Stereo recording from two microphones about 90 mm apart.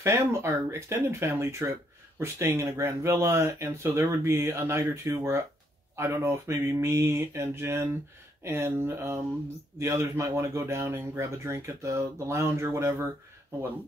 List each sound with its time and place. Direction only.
0.0 s speech: 30° right (ahead or behind)
5.9 s mantra: 30° right (ahead or behind)
9.8 s speech: 35° right (ahead or behind)